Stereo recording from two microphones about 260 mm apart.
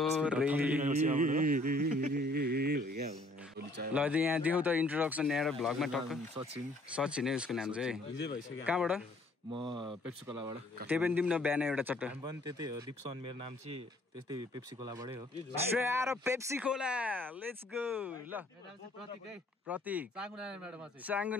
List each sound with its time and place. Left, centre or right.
0.0 s speech: centre
0.8 s speech: right
1.9 s a sound: right
3.9 s speech: centre
6.3 s speech: right
7.0 s speech: centre
9.5 s speech: centre
10.9 s speech: centre
19.7 s speech: centre